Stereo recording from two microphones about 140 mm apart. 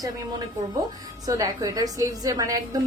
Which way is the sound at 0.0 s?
25° right (ahead or behind).